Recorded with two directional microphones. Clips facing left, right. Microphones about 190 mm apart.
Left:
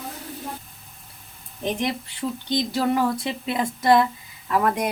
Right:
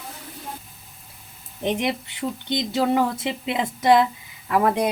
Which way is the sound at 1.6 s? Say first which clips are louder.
Right 2 dB; 20° right (ahead or behind).